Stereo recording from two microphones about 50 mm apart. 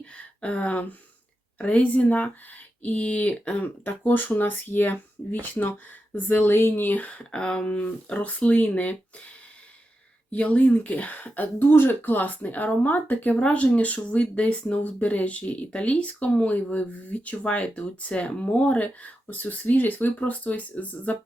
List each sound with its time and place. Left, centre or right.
0.0 s a sound: left
1.5 s speech: left
3.8 s speech: left
6.5 s speech: left
10.3 s speech: left
11.3 s speech: left